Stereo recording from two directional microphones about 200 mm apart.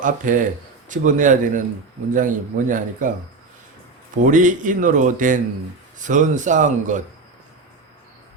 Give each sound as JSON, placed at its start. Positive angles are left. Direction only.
{"t": 0.0, "sound": "speech", "side_deg": -40}
{"t": 4.3, "sound": "speech", "side_deg": -40}